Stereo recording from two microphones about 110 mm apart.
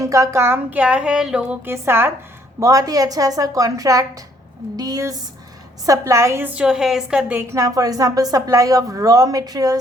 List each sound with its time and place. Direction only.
0.0 s speech: 30° right (ahead or behind); by 1.7 s 10° right (ahead or behind)
1.7 s a woman's voice: 20° right (ahead or behind)
7.3 s a woman's voice: 30° right (ahead or behind)